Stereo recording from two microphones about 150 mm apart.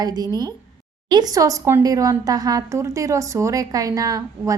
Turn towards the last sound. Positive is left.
turn(degrees=-25)  # may be behind; listen again after turning